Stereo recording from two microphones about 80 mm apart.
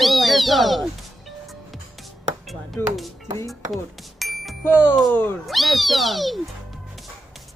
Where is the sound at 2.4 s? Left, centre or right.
Centre.